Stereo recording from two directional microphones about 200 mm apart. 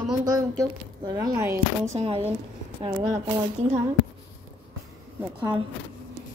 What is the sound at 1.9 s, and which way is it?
Speech, 30° right (ahead or behind).